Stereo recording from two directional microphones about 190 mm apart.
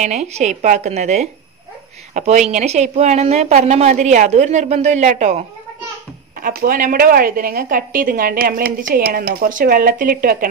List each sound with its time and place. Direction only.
0.0 s a woman's voice: 35° right (ahead or behind)
6.4 s a woman's voice: 50° right (ahead or behind)